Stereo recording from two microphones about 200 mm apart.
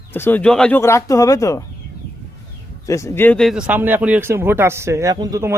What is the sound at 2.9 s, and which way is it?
Speech, 15° left (ahead or behind).